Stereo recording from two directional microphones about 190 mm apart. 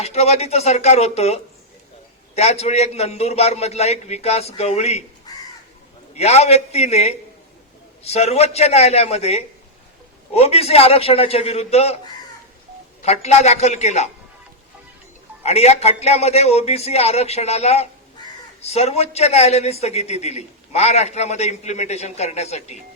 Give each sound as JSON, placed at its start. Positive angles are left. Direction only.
{"t": 0.0, "sound": "speech", "side_deg": 35}
{"t": 6.1, "sound": "speech", "side_deg": 35}
{"t": 13.0, "sound": "speech", "side_deg": 35}
{"t": 15.4, "sound": "speech", "side_deg": 35}